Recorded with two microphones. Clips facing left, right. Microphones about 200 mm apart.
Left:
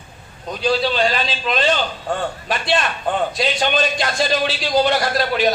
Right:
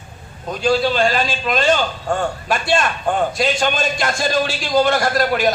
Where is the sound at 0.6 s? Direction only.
50° right (ahead or behind).